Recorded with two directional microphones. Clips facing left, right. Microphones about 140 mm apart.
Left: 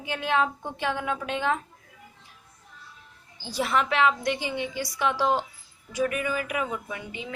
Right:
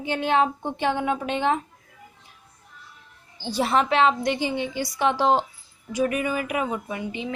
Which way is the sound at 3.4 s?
30° right (ahead or behind).